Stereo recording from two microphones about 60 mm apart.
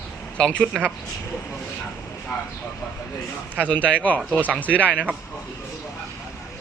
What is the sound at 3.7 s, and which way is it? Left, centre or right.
Speech, left.